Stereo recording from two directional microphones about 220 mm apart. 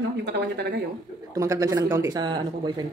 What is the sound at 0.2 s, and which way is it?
Speech, 50° right (ahead or behind).